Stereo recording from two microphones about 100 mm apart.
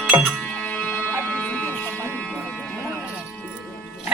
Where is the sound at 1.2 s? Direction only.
15° left (ahead or behind).